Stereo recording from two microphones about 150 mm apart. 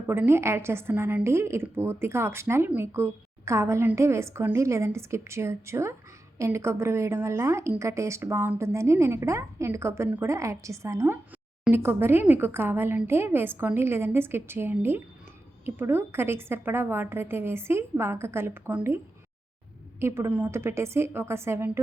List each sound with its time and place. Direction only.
0.1 s a woman's voice: 15° right (ahead or behind)
20.0 s a woman's voice: 15° right (ahead or behind)